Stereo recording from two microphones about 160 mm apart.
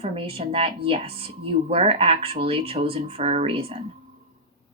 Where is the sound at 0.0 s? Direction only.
35° right (ahead or behind).